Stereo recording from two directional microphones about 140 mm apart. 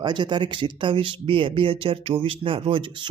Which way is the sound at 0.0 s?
35° right (ahead or behind).